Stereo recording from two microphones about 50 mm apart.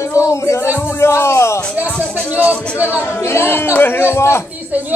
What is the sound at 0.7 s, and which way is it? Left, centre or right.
Speech, left.